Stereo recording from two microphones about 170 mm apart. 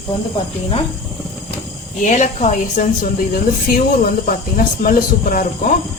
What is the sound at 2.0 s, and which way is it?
A woman's voice, 45° left (ahead or behind).